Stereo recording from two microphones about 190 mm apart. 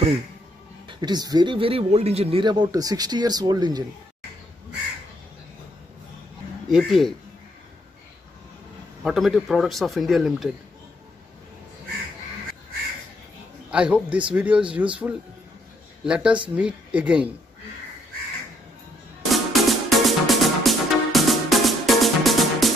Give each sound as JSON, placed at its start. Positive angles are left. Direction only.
{"t": 0.8, "sound": "speech", "side_deg": -20}
{"t": 6.7, "sound": "speech", "side_deg": 0}
{"t": 9.0, "sound": "speech", "side_deg": 0}
{"t": 13.7, "sound": "speech", "side_deg": -5}
{"t": 19.3, "sound": "music", "side_deg": 0}